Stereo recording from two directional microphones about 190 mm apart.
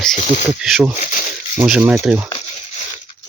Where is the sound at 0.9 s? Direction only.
40° left (ahead or behind).